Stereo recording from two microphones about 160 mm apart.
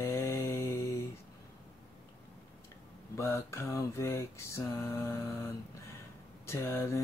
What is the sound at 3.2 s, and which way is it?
Speech, 15° left (ahead or behind).